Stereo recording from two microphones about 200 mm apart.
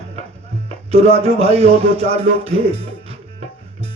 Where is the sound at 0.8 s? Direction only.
30° right (ahead or behind).